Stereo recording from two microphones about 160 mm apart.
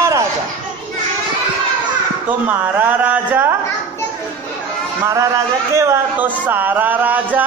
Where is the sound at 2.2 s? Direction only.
10° right (ahead or behind).